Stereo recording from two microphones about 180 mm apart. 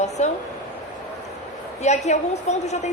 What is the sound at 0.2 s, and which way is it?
Speech, 40° left (ahead or behind).